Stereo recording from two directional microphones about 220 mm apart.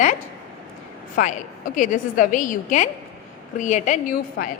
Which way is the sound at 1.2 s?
35° left (ahead or behind).